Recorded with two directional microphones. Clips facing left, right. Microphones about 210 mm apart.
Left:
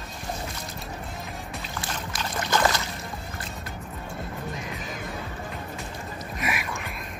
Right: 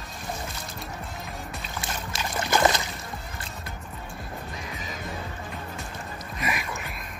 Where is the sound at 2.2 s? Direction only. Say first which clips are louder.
Right 2 dB; 15° right (ahead or behind).